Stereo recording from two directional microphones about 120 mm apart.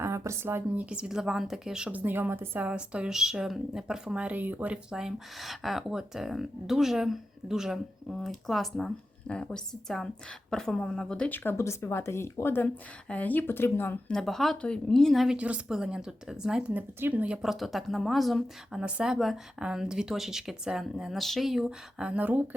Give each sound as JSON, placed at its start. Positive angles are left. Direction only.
{"t": 0.0, "sound": "speech", "side_deg": -20}
{"t": 14.1, "sound": "speech", "side_deg": 5}